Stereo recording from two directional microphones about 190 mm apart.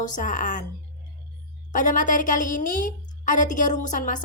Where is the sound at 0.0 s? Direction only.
40° left (ahead or behind).